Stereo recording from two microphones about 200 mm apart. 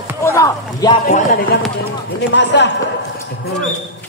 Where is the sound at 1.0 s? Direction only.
45° left (ahead or behind).